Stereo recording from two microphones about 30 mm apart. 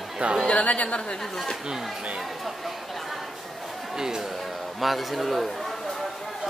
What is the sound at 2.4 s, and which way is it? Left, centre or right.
Speech, centre.